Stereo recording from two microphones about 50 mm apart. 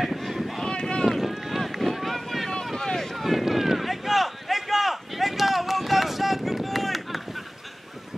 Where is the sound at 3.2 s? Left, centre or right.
Centre.